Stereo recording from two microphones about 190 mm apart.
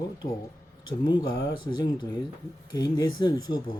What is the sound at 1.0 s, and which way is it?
Speech, 20° left (ahead or behind).